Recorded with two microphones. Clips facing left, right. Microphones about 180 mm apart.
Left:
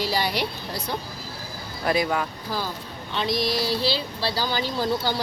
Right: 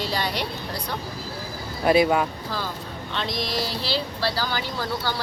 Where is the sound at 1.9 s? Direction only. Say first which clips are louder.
Right 5 dB; 20° right (ahead or behind).